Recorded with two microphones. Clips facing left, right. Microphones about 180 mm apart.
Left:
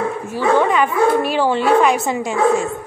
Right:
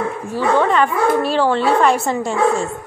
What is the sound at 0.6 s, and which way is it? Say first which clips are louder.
A woman's voice: even; 10° left (ahead or behind).